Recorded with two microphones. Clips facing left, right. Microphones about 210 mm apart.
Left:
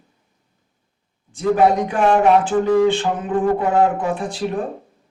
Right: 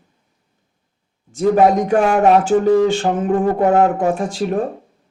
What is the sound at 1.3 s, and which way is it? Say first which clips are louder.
A man's voice: right 3 dB; 45° right (ahead or behind).